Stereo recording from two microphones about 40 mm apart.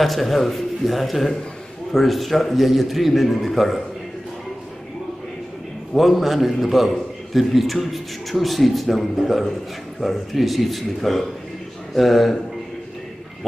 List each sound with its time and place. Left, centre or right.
0.0 s a man's voice: centre
5.9 s a man's voice: centre